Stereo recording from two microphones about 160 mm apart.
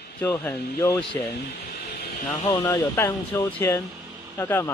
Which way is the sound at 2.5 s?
20° left (ahead or behind).